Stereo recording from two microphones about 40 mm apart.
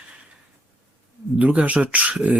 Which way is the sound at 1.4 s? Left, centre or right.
Right.